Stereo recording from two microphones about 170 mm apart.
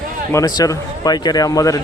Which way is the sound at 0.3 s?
20° left (ahead or behind).